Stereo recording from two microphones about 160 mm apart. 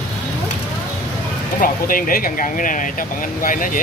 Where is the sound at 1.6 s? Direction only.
60° left (ahead or behind).